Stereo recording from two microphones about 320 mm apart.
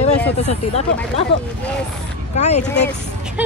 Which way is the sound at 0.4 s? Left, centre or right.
Centre.